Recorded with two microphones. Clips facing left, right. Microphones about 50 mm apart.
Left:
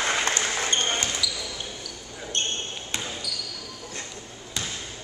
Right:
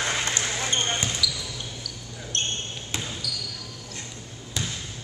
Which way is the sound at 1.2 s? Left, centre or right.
Centre.